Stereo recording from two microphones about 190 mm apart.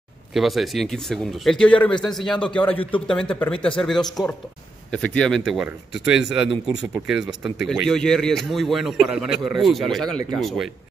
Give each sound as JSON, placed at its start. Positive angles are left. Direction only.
{"t": 0.3, "sound": "speech", "side_deg": 0}
{"t": 3.5, "sound": "speech", "side_deg": 25}
{"t": 4.9, "sound": "speech", "side_deg": 5}